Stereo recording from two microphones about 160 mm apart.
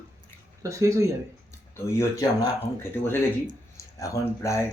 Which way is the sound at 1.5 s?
15° left (ahead or behind).